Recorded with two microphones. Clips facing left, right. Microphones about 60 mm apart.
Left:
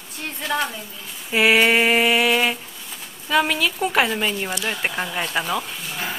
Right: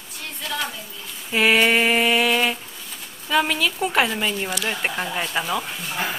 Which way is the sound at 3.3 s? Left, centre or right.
Centre.